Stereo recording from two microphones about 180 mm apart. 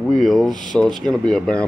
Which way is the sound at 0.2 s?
Centre (ahead or behind).